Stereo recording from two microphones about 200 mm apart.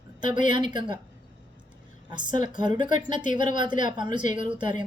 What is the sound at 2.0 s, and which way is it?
A woman's voice, 20° right (ahead or behind).